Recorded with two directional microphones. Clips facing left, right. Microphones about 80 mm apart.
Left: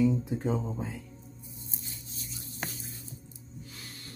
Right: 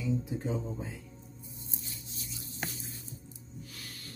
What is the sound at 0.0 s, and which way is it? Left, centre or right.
Speech, left.